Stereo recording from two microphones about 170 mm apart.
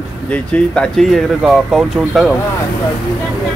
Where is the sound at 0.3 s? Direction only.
5° left (ahead or behind).